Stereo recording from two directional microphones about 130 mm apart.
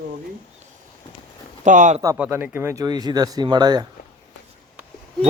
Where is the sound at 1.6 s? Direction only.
75° right (ahead or behind).